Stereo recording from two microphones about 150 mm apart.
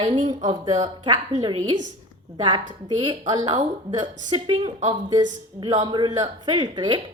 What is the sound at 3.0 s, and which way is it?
A woman's voice, 30° right (ahead or behind).